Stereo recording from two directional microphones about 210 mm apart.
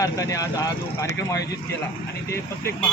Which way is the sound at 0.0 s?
15° left (ahead or behind).